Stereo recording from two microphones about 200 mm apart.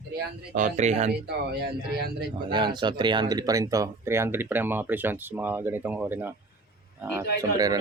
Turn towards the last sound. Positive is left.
turn(degrees=-20)  # may be behind; listen again after turning